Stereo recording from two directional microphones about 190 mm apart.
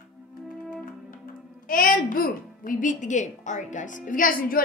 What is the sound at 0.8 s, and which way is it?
Music, 45° left (ahead or behind).